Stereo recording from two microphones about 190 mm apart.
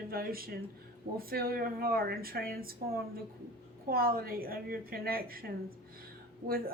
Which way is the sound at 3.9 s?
50° right (ahead or behind).